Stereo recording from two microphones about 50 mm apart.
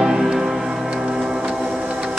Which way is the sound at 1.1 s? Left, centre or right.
Centre.